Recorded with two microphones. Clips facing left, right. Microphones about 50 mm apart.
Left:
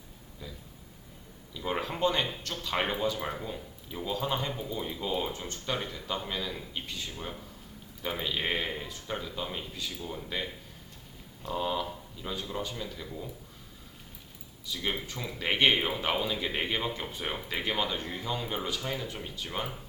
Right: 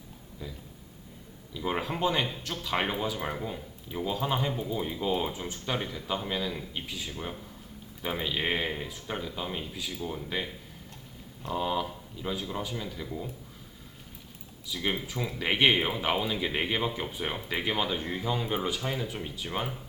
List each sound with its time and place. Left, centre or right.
1.5 s speech: centre
14.7 s speech: centre